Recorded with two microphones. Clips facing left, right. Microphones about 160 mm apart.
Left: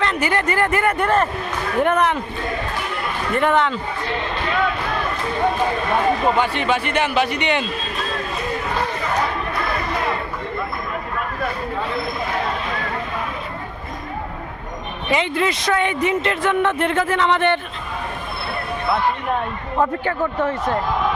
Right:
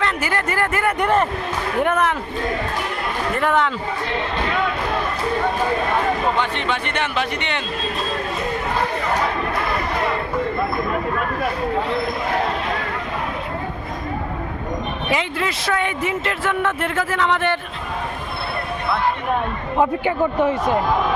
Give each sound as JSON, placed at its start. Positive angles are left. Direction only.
{"t": 0.0, "sound": "speech", "side_deg": -5}
{"t": 0.9, "sound": "a man's voice", "side_deg": -15}
{"t": 3.3, "sound": "speech", "side_deg": -5}
{"t": 6.4, "sound": "speech", "side_deg": 10}
{"t": 15.1, "sound": "speech", "side_deg": 0}
{"t": 19.7, "sound": "a man's voice", "side_deg": -15}